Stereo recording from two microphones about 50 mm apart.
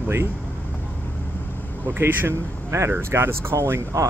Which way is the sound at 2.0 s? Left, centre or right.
Right.